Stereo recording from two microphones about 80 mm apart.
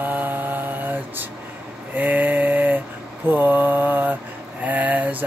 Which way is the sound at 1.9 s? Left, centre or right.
Right.